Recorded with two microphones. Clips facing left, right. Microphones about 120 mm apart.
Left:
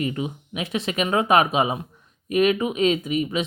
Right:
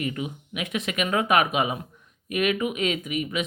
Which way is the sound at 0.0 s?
30° left (ahead or behind).